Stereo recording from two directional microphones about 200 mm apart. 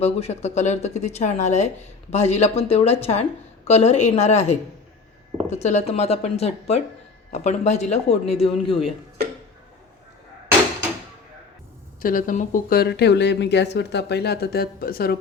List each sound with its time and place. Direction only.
0.0 s speech: 30° left (ahead or behind)
12.0 s speech: 45° left (ahead or behind)